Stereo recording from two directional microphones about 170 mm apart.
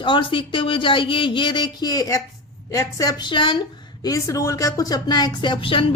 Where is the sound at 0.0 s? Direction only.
30° left (ahead or behind).